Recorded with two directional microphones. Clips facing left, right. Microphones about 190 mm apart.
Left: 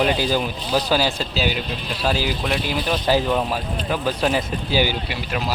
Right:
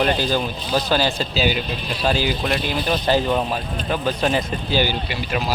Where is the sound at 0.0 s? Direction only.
10° left (ahead or behind).